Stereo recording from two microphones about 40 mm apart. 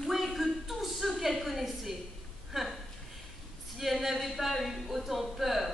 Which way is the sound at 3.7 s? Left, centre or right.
Centre.